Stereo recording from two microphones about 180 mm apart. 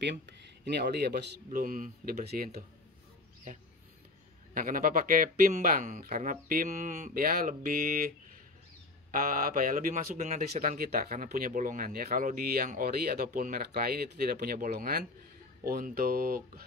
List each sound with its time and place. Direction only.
0.7 s speech: 65° right (ahead or behind)
4.6 s speech: 50° right (ahead or behind)
9.1 s speech: 50° right (ahead or behind)